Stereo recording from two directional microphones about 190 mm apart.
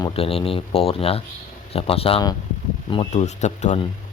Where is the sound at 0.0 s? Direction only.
30° left (ahead or behind).